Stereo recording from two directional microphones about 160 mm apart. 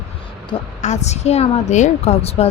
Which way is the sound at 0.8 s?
45° left (ahead or behind).